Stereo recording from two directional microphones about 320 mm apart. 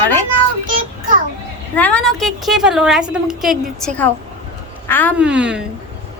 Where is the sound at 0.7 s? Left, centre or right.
Right.